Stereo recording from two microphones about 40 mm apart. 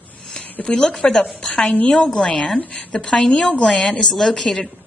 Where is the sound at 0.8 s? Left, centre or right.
Centre.